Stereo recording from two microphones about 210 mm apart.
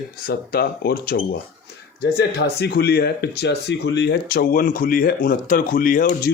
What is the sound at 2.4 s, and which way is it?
A man's voice, 50° left (ahead or behind).